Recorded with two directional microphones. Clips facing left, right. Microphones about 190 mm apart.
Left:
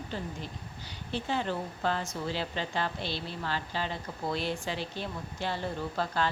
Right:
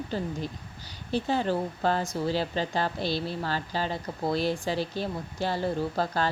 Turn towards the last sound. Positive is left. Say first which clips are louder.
# right 3 dB
turn(degrees=-40)  # may be behind; listen again after turning